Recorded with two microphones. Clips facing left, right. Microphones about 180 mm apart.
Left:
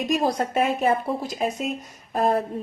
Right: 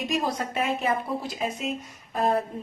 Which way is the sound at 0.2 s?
45° left (ahead or behind).